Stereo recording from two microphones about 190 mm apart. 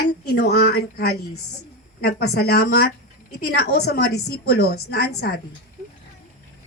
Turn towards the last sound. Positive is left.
turn(degrees=55)  # may be behind; listen again after turning